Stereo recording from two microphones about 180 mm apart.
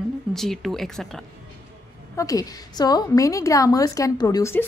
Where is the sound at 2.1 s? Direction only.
20° left (ahead or behind).